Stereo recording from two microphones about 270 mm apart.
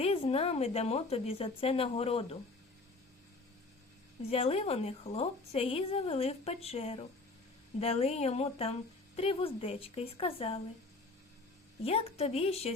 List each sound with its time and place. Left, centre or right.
0.0 s a woman's voice: left
4.3 s a woman's voice: left
11.8 s a woman's voice: left